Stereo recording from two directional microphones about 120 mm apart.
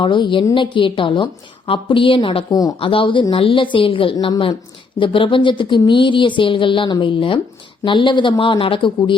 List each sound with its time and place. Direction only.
0.0 s speech: 40° left (ahead or behind)
2.5 s speech: 30° left (ahead or behind)
2.8 s speech: 45° left (ahead or behind)